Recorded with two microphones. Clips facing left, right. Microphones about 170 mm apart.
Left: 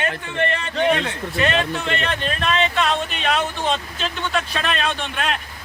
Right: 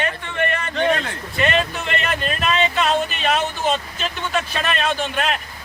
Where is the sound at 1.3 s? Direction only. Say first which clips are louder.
Right 1 dB; centre (ahead or behind).